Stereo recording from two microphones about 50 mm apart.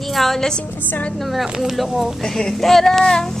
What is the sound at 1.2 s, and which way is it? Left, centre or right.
Speech, centre.